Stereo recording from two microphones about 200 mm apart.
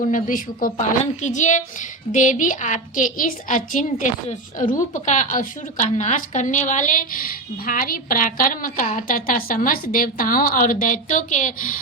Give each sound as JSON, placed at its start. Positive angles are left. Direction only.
{"t": 0.0, "sound": "a woman's voice", "side_deg": 40}